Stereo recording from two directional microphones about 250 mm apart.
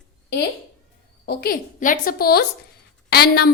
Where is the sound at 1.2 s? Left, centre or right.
Left.